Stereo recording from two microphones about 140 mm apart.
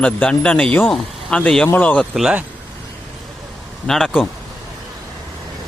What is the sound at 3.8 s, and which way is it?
Speech, 5° left (ahead or behind).